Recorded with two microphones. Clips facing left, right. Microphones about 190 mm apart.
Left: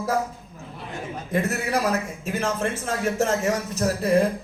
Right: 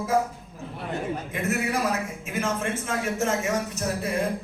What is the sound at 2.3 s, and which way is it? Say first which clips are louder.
Speech: left 3 dB; 35° left (ahead or behind).